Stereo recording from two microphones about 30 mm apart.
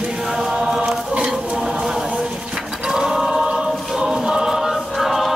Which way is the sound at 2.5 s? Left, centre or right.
Centre.